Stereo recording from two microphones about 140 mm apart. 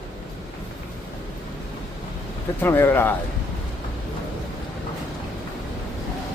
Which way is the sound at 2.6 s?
15° left (ahead or behind).